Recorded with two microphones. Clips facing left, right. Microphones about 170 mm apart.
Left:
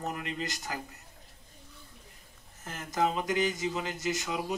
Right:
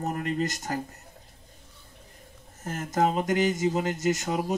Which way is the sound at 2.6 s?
45° right (ahead or behind).